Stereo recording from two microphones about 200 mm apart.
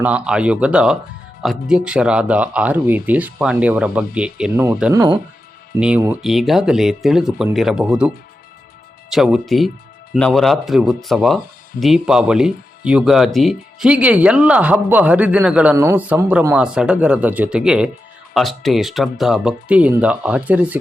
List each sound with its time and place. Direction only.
0.0 s speech: 5° right (ahead or behind)
4.9 s speech: 20° right (ahead or behind)
5.8 s speech: 5° right (ahead or behind)